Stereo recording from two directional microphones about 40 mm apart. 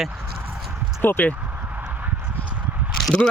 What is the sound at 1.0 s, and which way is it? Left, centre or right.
Speech, left.